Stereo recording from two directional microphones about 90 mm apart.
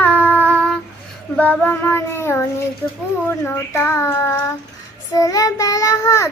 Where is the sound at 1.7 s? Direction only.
25° left (ahead or behind).